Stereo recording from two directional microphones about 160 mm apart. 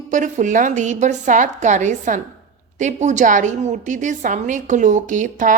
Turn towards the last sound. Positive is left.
turn(degrees=-55)  # may be behind; listen again after turning